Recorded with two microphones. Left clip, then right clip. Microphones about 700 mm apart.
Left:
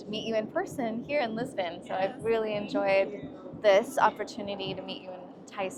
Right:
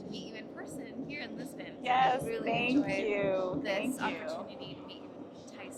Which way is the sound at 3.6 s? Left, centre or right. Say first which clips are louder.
Left 11 dB; left.